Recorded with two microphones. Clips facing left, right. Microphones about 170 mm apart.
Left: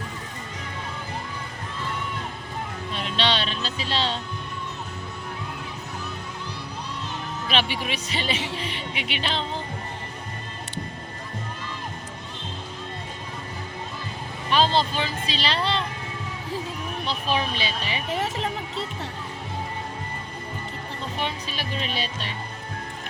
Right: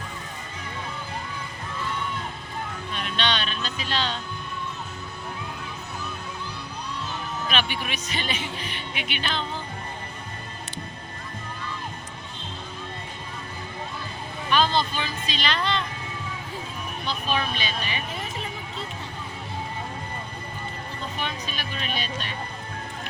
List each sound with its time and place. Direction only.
2.9 s music: 30° left (ahead or behind)
7.4 s speech: 30° left (ahead or behind)
14.5 s speech: 30° left (ahead or behind)
17.1 s speech: 25° left (ahead or behind)
18.1 s music: 75° left (ahead or behind)
21.2 s music: 30° left (ahead or behind)